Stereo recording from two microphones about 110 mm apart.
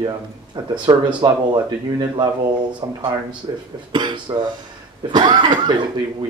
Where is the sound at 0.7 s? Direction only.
45° right (ahead or behind).